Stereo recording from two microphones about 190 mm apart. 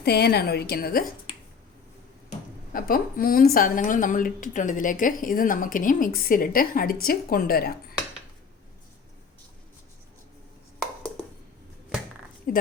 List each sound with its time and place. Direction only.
0.0 s a woman's voice: 60° left (ahead or behind)
2.7 s a woman's voice: 50° left (ahead or behind)
12.5 s a woman's voice: 45° left (ahead or behind)